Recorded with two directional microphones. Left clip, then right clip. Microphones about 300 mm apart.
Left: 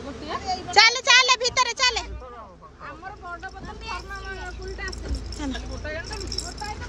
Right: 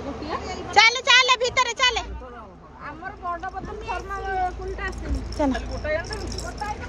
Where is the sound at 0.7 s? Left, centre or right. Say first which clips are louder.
Even; centre.